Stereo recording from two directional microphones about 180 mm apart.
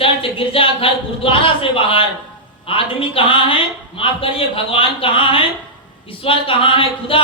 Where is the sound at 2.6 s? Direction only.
30° left (ahead or behind).